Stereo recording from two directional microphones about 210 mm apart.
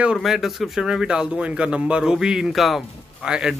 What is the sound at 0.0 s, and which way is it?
Speech, 5° right (ahead or behind).